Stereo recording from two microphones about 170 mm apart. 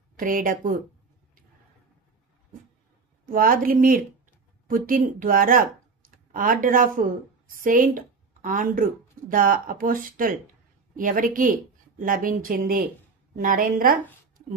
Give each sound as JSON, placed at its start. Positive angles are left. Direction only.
{"t": 0.1, "sound": "speech", "side_deg": -55}
{"t": 3.3, "sound": "a woman's voice", "side_deg": -55}